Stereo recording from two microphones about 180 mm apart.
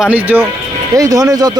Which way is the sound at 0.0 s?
10° right (ahead or behind).